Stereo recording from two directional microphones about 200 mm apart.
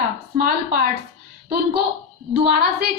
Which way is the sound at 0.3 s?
45° right (ahead or behind).